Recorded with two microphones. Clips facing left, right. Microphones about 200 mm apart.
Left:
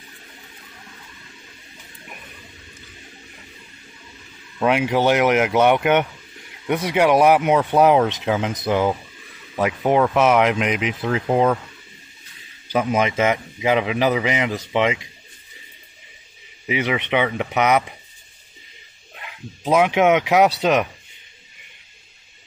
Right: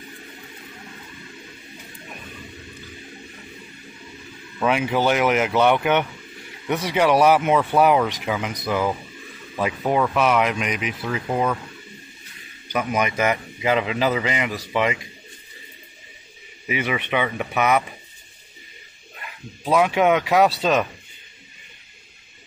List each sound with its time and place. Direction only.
4.6 s a man's voice: 15° left (ahead or behind)
12.6 s a man's voice: 25° left (ahead or behind)
16.6 s a man's voice: 15° left (ahead or behind)
19.2 s a man's voice: 20° left (ahead or behind)